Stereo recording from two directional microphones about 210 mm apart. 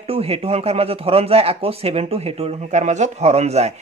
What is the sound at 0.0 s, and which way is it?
Speech, 30° right (ahead or behind).